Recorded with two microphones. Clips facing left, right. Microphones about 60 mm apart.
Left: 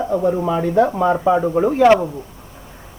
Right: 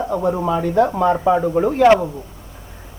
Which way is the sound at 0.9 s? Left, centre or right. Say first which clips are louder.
Even; centre.